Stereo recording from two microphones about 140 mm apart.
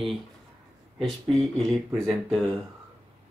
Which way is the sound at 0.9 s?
Centre (ahead or behind).